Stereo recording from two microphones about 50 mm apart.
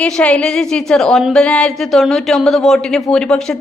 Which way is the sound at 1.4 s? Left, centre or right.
Left.